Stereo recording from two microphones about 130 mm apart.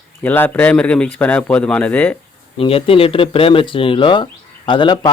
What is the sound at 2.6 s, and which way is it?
Speech, 45° left (ahead or behind).